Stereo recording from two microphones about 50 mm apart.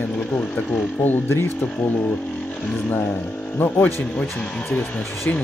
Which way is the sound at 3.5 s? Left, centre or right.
Left.